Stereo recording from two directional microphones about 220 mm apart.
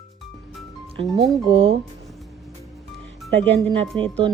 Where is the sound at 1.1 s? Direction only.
25° right (ahead or behind).